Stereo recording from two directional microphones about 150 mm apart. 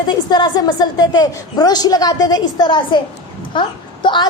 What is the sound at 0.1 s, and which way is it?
A woman's voice, 30° left (ahead or behind).